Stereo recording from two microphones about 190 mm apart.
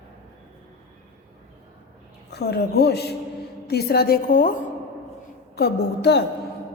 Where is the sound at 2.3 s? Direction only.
60° left (ahead or behind).